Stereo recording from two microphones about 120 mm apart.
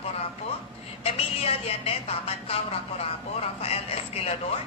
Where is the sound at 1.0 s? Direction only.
55° left (ahead or behind).